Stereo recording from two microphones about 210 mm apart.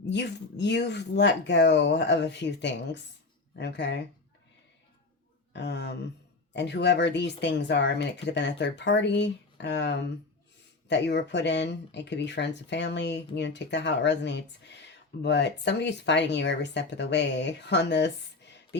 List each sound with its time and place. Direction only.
0.0 s speech: 55° left (ahead or behind)
5.5 s speech: 55° left (ahead or behind)